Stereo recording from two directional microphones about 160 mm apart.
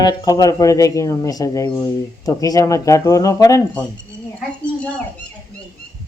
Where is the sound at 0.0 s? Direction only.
25° left (ahead or behind).